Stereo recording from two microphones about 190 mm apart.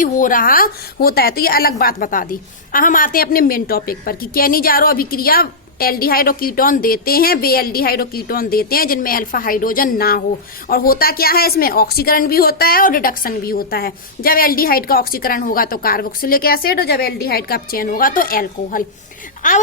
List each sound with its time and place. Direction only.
0.0 s a woman's voice: 45° left (ahead or behind)